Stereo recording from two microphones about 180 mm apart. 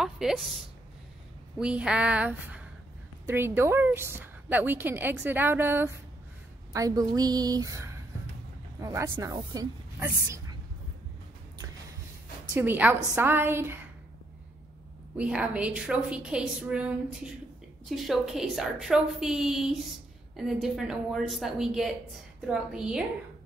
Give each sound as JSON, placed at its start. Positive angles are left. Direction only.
{"t": 0.0, "sound": "a woman's voice", "side_deg": 0}
{"t": 12.5, "sound": "a woman's voice", "side_deg": -10}
{"t": 15.1, "sound": "a woman's voice", "side_deg": -5}